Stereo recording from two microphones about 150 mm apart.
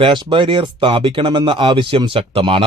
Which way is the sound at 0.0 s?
35° right (ahead or behind).